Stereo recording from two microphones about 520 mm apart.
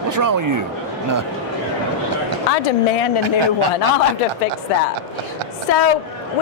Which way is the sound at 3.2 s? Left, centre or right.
Right.